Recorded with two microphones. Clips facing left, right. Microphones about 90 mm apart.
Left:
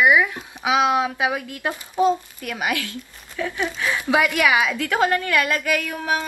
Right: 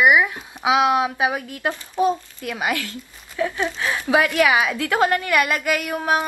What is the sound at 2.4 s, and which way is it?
Speech, 20° right (ahead or behind).